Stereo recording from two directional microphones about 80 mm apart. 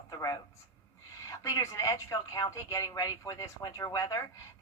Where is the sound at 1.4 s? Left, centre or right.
Left.